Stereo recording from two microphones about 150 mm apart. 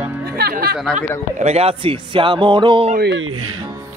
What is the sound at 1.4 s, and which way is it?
A man's voice, 45° right (ahead or behind).